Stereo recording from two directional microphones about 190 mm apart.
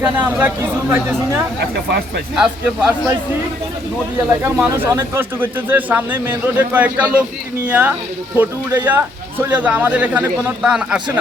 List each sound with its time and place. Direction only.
0.0 s speech: 10° right (ahead or behind)
2.3 s a man's voice: 5° right (ahead or behind)
4.4 s speech: 10° right (ahead or behind)